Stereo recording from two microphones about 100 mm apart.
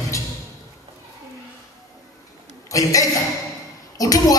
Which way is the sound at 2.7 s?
35° left (ahead or behind).